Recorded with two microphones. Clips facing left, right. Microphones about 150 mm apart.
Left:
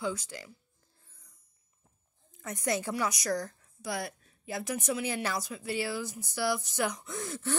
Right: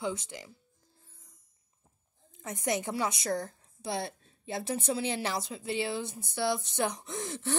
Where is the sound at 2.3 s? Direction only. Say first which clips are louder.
Even; 20° right (ahead or behind).